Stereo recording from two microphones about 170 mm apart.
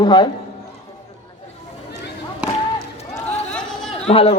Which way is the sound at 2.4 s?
5° right (ahead or behind).